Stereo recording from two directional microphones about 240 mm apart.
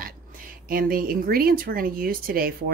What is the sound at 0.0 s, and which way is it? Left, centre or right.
Speech, right.